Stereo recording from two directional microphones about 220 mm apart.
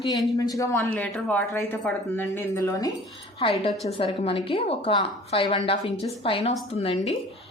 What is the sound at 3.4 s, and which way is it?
A woman's voice, 25° left (ahead or behind).